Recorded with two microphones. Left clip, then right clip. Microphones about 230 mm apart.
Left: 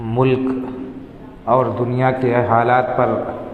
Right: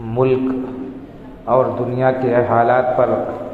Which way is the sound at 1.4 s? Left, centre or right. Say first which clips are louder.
Even; left.